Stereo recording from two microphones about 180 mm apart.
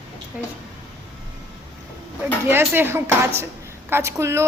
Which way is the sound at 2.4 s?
10° right (ahead or behind).